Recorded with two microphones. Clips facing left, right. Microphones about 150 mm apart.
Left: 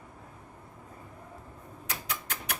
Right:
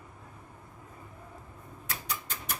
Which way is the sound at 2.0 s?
70° left (ahead or behind).